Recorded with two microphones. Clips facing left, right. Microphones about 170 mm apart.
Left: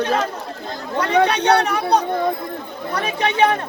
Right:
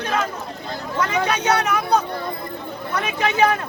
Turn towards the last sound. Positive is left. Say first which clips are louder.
# left 1 dB
turn(degrees=30)  # may be behind; listen again after turning